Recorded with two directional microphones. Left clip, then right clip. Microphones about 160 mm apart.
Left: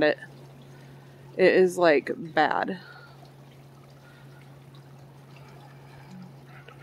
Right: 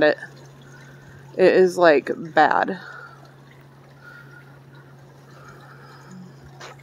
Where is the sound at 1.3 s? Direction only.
Centre (ahead or behind).